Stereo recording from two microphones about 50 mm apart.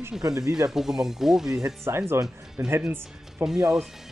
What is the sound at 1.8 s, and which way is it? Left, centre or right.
Speech, right.